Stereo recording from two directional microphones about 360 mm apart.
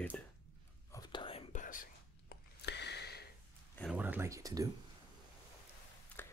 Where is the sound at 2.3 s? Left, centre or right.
Left.